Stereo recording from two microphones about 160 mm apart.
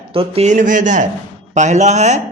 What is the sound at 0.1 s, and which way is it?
A man's voice, 40° right (ahead or behind).